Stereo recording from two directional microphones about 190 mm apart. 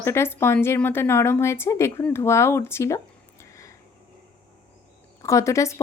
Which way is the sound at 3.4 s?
15° left (ahead or behind).